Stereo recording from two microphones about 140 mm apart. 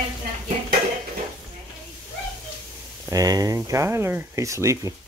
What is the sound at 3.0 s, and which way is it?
Speech, 25° right (ahead or behind).